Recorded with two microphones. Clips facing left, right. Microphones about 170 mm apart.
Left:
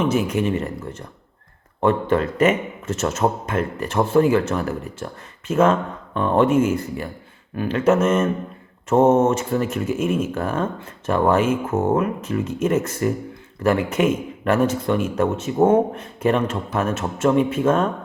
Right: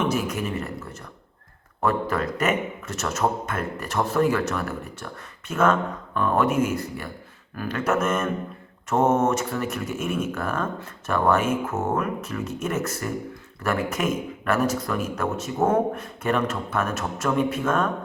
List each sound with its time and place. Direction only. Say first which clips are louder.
0.2 s speech: left 6 dB; 30° left (ahead or behind)
13.9 s speech: left 6 dB; 30° left (ahead or behind)